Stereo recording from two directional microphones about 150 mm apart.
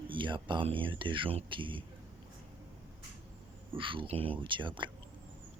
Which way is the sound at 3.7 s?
35° right (ahead or behind).